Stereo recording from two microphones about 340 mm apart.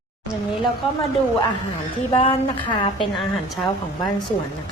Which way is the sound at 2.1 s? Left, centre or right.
Centre.